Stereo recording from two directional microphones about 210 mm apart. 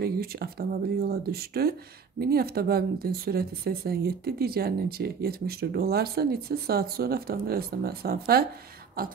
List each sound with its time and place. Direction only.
0.0 s speech: 45° right (ahead or behind)